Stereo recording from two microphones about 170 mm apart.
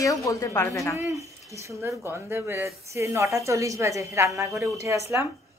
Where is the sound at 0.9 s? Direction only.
15° right (ahead or behind).